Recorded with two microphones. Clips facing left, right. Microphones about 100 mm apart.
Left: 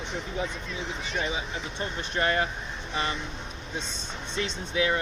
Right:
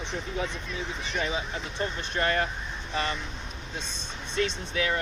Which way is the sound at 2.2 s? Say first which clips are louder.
Left 1 dB; 20° left (ahead or behind).